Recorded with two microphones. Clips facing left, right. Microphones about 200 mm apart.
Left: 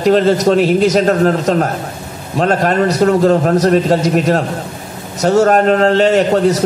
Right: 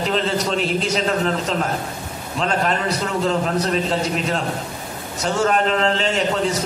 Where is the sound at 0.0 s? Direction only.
40° left (ahead or behind).